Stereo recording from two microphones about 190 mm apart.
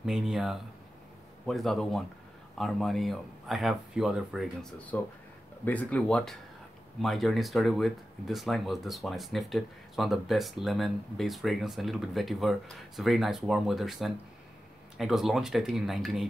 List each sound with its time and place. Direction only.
0.0 s speech: centre (ahead or behind)